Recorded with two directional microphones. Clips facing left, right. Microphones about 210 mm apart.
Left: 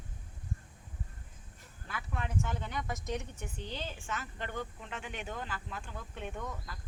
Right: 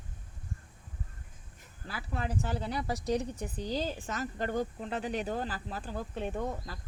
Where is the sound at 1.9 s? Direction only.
35° right (ahead or behind).